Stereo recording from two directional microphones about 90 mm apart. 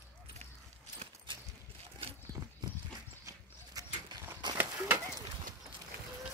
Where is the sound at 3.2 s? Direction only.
40° right (ahead or behind).